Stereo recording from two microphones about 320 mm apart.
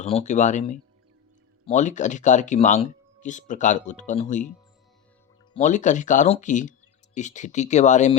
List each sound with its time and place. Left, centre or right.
0.0 s speech: centre
5.5 s speech: left